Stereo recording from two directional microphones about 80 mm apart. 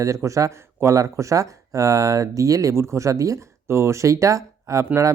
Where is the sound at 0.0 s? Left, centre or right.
Right.